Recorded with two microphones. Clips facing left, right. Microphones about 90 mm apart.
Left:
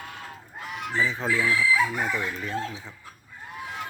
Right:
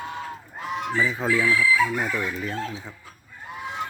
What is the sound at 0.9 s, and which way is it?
Speech, 5° right (ahead or behind).